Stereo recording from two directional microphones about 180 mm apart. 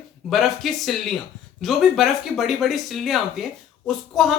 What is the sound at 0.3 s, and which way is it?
Speech, centre (ahead or behind).